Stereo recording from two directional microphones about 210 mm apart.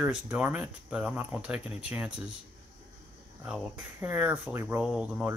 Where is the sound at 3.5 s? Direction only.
5° right (ahead or behind).